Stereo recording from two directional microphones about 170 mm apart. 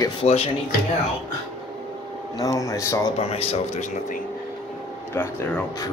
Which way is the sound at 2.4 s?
20° left (ahead or behind).